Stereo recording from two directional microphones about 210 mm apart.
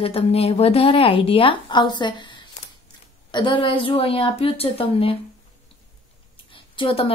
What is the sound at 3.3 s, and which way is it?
A woman's voice, 20° left (ahead or behind).